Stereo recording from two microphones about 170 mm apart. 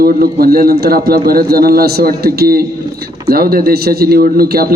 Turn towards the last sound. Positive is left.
turn(degrees=-65)  # may be behind; listen again after turning